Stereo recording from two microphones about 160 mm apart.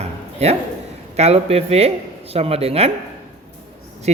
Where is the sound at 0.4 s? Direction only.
40° right (ahead or behind).